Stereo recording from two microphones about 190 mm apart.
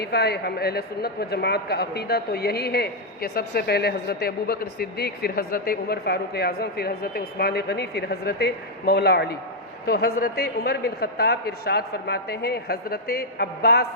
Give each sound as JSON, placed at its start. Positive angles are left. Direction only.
{"t": 0.0, "sound": "a man's voice", "side_deg": 60}